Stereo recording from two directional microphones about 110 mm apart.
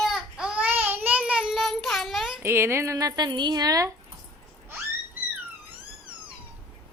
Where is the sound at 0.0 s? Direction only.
5° right (ahead or behind).